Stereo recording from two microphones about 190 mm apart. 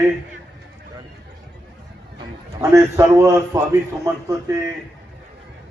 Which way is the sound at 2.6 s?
15° right (ahead or behind).